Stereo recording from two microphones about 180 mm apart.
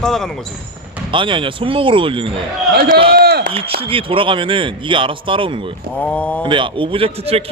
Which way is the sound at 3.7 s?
30° right (ahead or behind).